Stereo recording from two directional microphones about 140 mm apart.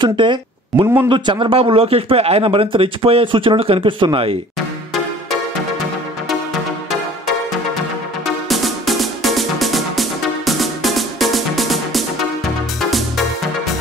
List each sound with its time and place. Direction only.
0.0 s speech: 35° right (ahead or behind)
8.5 s music: centre (ahead or behind)